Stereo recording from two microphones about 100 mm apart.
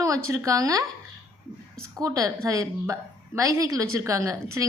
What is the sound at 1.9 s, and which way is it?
A woman's voice, 35° right (ahead or behind).